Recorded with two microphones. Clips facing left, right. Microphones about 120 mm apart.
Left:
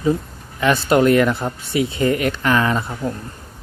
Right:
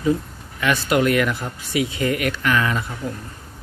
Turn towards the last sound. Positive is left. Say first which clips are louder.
# left 3 dB
turn(degrees=35)  # may be behind; listen again after turning